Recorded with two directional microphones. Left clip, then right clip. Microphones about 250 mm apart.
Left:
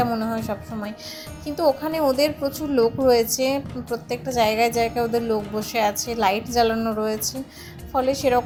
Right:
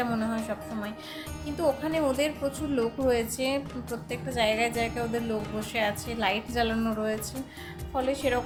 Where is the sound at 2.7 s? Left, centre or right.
Centre.